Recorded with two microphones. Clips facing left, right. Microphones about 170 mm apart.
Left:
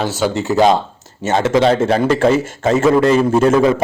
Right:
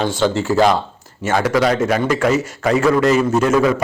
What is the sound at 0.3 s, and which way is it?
A man's voice, 20° left (ahead or behind).